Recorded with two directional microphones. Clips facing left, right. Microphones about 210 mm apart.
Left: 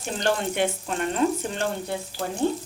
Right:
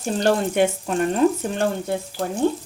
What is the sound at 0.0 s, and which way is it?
Speech, 40° right (ahead or behind).